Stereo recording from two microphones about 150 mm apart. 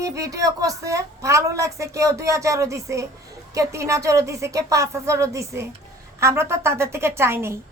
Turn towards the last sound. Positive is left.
turn(degrees=-15)  # may be behind; listen again after turning